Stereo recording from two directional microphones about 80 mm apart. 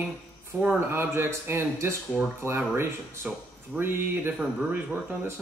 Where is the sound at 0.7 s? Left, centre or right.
Right.